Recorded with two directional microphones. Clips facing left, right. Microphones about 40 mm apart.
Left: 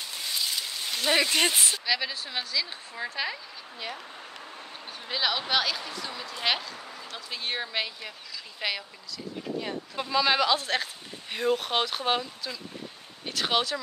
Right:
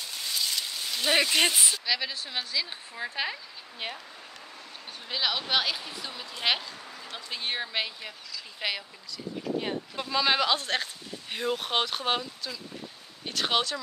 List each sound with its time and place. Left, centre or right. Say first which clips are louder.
0.3 s a sound: even; centre
1.0 s speech: even; centre
3.8 s speech: right 1 dB; right
5.0 s speech: left 1 dB; centre
6.8 s a sound: left 2 dB; centre
7.1 s speech: even; centre
9.9 s speech: left 4 dB; centre
10.2 s speech: even; centre